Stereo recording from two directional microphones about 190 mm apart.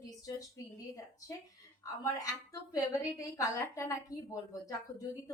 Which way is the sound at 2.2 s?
20° left (ahead or behind).